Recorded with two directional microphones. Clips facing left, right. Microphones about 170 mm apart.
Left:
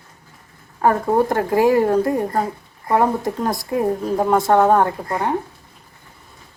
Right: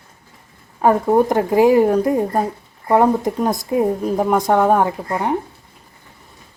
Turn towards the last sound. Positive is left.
turn(degrees=-15)  # may be behind; listen again after turning